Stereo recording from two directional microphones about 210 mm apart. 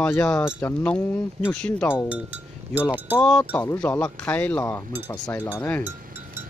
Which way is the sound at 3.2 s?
5° left (ahead or behind).